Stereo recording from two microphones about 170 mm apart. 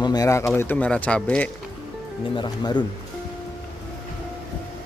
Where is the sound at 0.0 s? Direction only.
20° left (ahead or behind); by 1.5 s 5° left (ahead or behind).